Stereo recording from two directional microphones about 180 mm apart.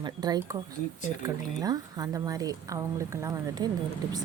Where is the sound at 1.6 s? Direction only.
20° right (ahead or behind).